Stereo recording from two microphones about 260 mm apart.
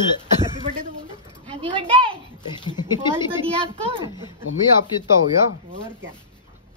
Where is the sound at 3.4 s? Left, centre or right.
Centre.